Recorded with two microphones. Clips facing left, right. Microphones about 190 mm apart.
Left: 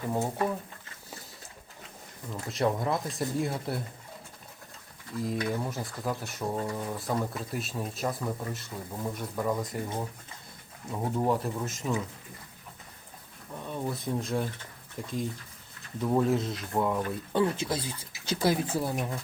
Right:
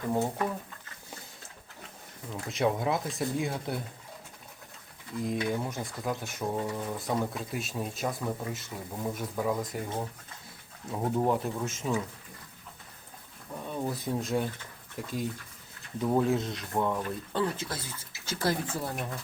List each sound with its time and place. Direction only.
2.3 s speech: centre (ahead or behind)
5.1 s speech: centre (ahead or behind)
13.5 s a sound: 5° right (ahead or behind)
14.9 s speech: centre (ahead or behind)
17.3 s speech: 15° left (ahead or behind)